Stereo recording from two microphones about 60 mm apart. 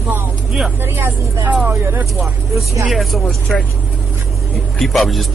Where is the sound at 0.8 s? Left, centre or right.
Right.